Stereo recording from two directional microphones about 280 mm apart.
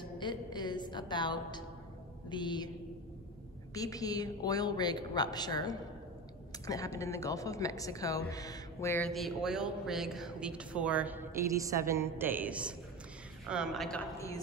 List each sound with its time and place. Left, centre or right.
0.2 s a woman's voice: centre
3.7 s a woman's voice: centre